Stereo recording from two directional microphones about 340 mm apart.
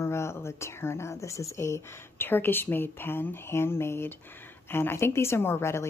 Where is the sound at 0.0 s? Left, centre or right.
Centre.